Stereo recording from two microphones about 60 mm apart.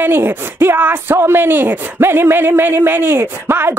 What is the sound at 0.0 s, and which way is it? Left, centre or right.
Speech, right.